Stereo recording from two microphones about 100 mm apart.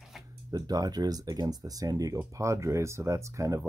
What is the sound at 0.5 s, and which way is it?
Speech, 40° right (ahead or behind).